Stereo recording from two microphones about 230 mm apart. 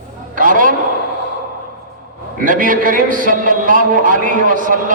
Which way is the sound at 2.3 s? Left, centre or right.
Right.